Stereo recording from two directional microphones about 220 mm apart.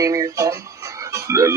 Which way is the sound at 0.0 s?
15° right (ahead or behind).